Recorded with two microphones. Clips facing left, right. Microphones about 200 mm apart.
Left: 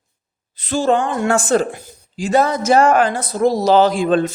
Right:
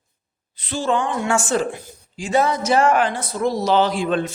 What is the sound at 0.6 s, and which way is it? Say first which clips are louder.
A woman's voice: left 5 dB; 45° left (ahead or behind).